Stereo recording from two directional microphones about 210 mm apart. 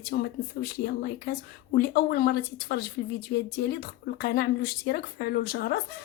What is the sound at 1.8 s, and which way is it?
Speech, 50° left (ahead or behind).